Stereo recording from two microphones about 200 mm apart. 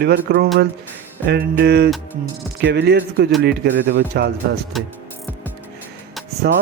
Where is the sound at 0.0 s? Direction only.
55° right (ahead or behind).